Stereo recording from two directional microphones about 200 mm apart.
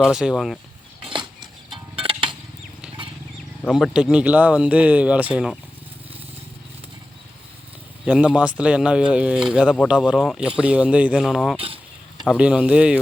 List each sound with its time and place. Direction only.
0.0 s speech: centre (ahead or behind)
2.0 s a sound: 25° right (ahead or behind)
3.6 s speech: centre (ahead or behind)
8.0 s speech: 5° right (ahead or behind)
11.5 s a sound: 30° right (ahead or behind)
12.2 s speech: 5° right (ahead or behind)